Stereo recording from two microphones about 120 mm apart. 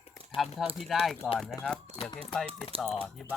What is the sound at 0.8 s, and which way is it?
Speech, centre (ahead or behind).